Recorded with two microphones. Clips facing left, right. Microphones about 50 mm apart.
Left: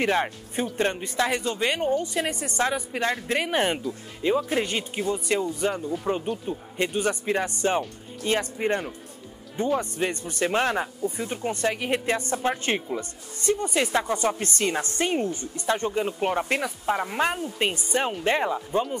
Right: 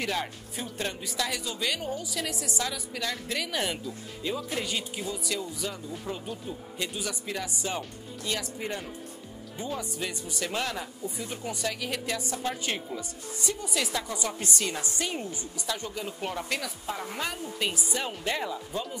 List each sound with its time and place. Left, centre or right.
0.0 s a woman's voice: left
2.6 s speech: left
10.0 s speech: left
13.4 s a woman's voice: left
13.7 s speech: left
14.1 s a woman's voice: left